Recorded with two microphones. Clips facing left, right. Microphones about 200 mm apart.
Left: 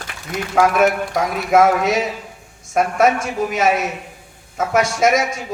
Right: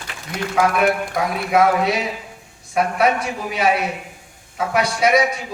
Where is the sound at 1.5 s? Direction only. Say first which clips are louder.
Left 3 dB; 45° left (ahead or behind).